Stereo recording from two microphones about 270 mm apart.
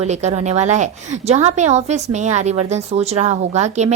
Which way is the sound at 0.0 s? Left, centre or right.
Right.